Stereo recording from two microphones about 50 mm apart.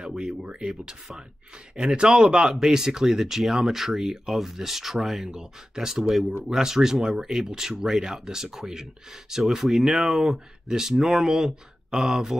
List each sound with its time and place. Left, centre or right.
0.1 s speech: centre